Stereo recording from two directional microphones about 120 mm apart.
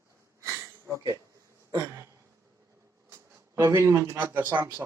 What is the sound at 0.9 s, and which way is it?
Speech, 30° right (ahead or behind).